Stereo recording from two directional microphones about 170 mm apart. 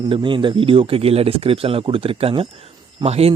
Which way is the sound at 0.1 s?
30° right (ahead or behind).